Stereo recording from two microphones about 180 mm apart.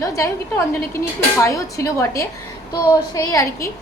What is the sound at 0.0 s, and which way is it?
A woman's voice, 15° left (ahead or behind).